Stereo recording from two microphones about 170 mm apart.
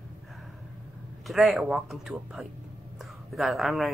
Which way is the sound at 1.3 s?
Centre (ahead or behind).